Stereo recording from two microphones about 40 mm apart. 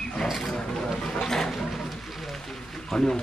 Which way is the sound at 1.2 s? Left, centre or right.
Centre.